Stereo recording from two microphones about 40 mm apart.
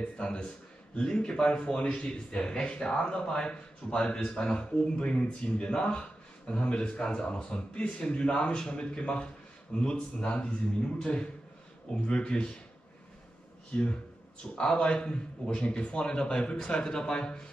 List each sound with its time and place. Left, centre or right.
0.0 s a man's voice: left
14.5 s a man's voice: left